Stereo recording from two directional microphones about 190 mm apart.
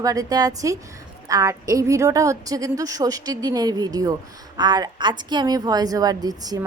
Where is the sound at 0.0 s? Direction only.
20° right (ahead or behind).